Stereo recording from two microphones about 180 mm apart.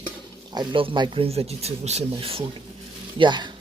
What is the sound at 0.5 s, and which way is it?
A man's voice, 25° right (ahead or behind).